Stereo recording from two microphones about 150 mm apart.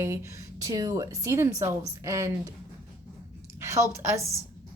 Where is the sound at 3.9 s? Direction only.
20° right (ahead or behind).